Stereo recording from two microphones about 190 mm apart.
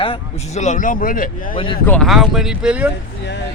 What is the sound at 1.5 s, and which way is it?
Speech, 25° left (ahead or behind).